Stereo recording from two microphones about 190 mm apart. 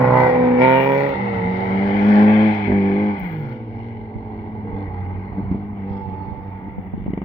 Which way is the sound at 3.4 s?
10° left (ahead or behind).